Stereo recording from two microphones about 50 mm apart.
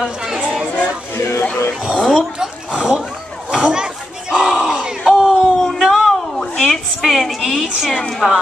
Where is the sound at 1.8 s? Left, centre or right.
Centre.